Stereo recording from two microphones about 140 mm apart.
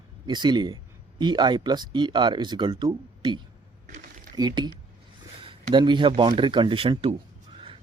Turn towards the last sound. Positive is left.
turn(degrees=-40)  # may be behind; listen again after turning